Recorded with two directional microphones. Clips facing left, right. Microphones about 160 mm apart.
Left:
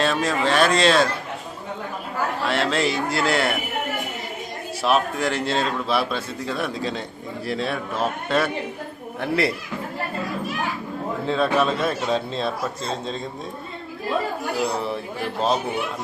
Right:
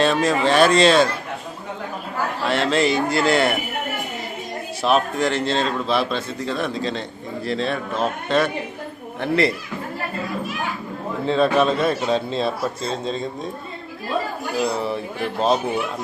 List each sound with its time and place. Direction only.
0.0 s a man's voice: centre (ahead or behind)
2.5 s a man's voice: centre (ahead or behind)
4.8 s a man's voice: 5° left (ahead or behind)
11.3 s a man's voice: centre (ahead or behind)
14.8 s a man's voice: centre (ahead or behind)